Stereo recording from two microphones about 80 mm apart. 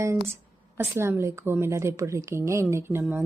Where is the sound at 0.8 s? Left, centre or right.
Right.